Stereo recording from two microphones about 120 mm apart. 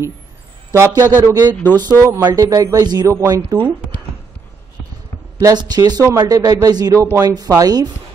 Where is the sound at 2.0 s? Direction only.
25° right (ahead or behind).